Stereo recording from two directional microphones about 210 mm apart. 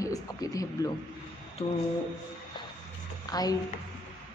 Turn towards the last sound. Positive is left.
turn(degrees=20)  # may be behind; listen again after turning